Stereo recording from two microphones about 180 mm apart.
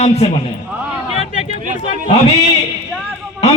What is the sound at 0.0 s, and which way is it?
Speech, 35° left (ahead or behind).